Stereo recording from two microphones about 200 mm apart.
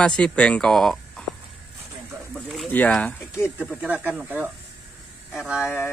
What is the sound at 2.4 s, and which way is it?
Speech, centre (ahead or behind).